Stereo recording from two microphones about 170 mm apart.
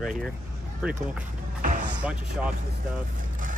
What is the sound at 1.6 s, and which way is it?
Music, 50° right (ahead or behind).